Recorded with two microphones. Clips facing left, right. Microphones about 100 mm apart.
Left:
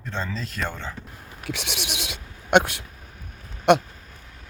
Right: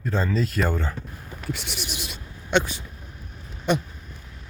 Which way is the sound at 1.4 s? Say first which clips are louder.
Left 1 dB; 80° left.